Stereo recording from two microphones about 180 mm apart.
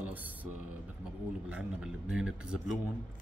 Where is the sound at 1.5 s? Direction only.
5° right (ahead or behind).